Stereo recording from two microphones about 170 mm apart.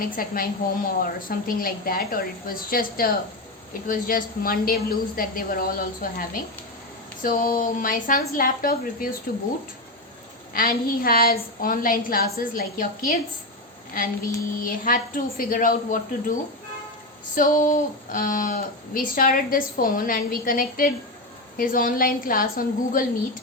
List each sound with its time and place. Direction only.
0.2 s a woman's voice: 60° left (ahead or behind)
10.5 s speech: 55° left (ahead or behind)
14.6 s a woman's voice: 55° left (ahead or behind)
17.3 s speech: 50° left (ahead or behind)